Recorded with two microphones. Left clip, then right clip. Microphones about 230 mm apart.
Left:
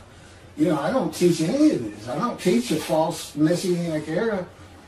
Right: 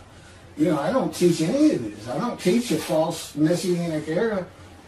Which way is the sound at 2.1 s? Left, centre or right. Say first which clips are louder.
Left 1 dB; centre.